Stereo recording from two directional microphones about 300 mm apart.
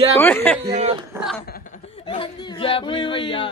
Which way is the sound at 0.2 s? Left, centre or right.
Centre.